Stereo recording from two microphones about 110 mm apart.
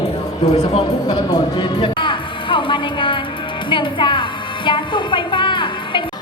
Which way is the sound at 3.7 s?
45° left (ahead or behind).